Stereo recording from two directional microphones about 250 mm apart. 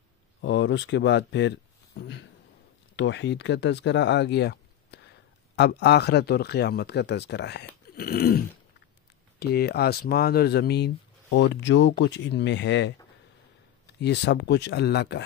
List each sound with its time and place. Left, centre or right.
0.4 s speech: left
2.0 s a sound: left
3.0 s speech: left
13.9 s speech: left